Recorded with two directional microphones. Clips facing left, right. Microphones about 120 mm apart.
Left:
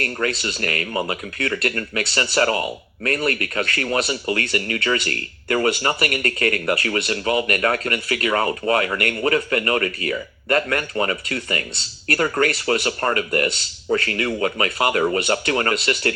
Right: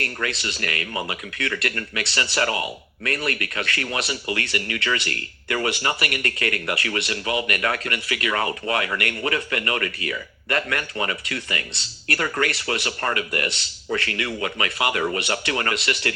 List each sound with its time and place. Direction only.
0.0 s speech: 40° left (ahead or behind)